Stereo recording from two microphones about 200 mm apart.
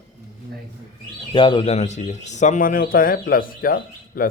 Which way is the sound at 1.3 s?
25° left (ahead or behind).